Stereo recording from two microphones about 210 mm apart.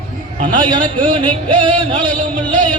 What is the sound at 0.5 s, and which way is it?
Music, 40° right (ahead or behind).